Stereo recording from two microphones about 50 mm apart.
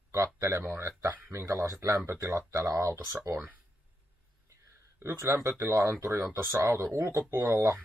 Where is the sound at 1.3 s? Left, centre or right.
Right.